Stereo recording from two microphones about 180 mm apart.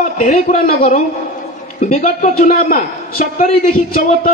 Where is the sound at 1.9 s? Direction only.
50° left (ahead or behind).